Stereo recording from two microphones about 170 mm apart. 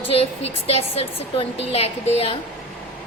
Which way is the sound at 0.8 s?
35° left (ahead or behind).